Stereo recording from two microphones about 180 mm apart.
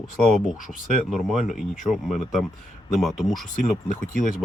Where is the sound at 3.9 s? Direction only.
45° left (ahead or behind).